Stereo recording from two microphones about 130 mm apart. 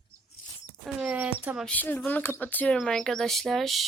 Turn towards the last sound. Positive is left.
turn(degrees=0)  # may be behind; listen again after turning